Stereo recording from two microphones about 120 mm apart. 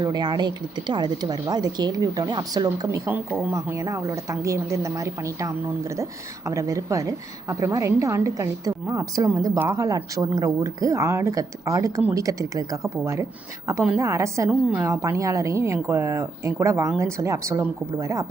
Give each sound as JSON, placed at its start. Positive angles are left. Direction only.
{"t": 0.0, "sound": "a woman's voice", "side_deg": -35}